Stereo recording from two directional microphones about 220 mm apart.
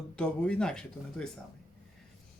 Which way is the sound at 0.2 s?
5° left (ahead or behind).